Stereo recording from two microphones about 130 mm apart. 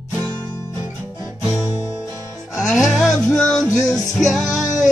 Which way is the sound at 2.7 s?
Centre (ahead or behind).